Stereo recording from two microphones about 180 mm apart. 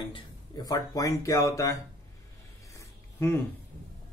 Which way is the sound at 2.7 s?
15° left (ahead or behind).